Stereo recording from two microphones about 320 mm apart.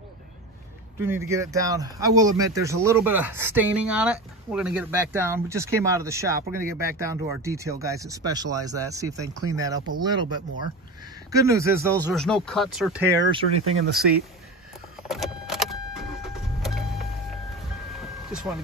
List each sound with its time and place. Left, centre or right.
1.0 s speech: centre
12.2 s speech: centre
13.7 s speech: right
15.0 s vehicle: centre
18.3 s speech: centre